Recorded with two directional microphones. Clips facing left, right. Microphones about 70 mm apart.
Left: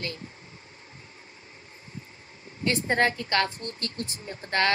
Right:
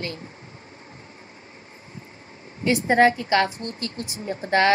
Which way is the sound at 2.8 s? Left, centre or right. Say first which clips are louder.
Right 8 dB; centre.